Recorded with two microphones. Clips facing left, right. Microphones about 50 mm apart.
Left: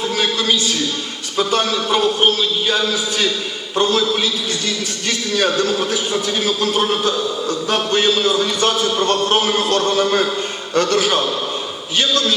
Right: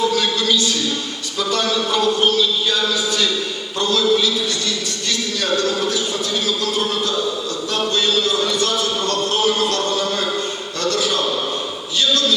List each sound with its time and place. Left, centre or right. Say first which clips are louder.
0.1 s a sound: even; left
1.4 s a man's voice: left 4 dB; left
1.6 s a man's voice: left 1 dB; left
5.5 s a man's voice: left 1 dB; left